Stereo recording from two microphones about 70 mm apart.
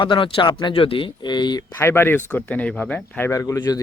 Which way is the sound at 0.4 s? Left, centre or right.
Left.